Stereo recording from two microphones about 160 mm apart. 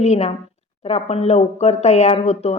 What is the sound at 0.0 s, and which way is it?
A woman's voice, 45° left (ahead or behind).